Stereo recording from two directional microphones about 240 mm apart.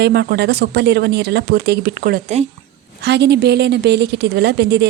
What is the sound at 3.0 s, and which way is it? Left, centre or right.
Speech, right.